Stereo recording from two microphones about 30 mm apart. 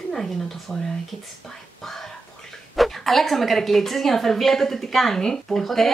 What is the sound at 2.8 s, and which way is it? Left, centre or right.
Speech, centre.